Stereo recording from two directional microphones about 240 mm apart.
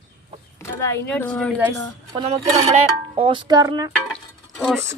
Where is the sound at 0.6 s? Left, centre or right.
Centre.